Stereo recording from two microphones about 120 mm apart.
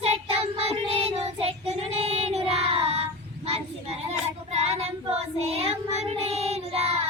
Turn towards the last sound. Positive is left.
turn(degrees=-55)  # may be behind; listen again after turning